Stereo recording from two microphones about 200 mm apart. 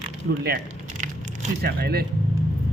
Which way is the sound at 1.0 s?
40° right (ahead or behind).